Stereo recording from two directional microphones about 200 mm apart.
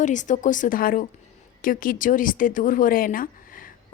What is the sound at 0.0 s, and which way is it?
Speech, 40° left (ahead or behind).